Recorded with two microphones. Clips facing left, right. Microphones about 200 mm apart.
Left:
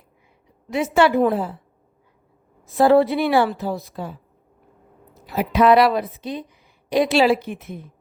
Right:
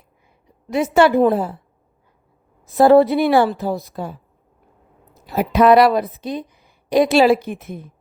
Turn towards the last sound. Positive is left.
turn(degrees=-50)  # may be behind; listen again after turning